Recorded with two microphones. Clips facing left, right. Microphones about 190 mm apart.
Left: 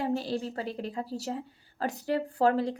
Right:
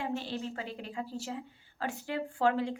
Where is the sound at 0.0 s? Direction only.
35° left (ahead or behind).